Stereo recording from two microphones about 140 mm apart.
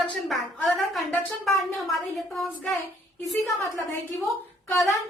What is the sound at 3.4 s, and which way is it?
Speech, 20° left (ahead or behind).